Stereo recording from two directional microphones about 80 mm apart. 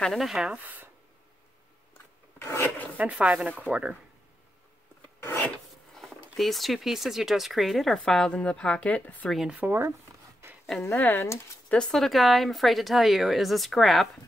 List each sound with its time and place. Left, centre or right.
0.0 s speech: centre
2.3 s filing: left
3.0 s speech: centre
5.9 s speech: centre
9.3 s speech: centre
9.6 s speech: right
10.4 s a sound: right
11.0 s speech: left
11.7 s speech: centre